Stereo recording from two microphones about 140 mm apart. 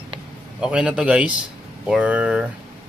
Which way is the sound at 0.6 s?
5° right (ahead or behind).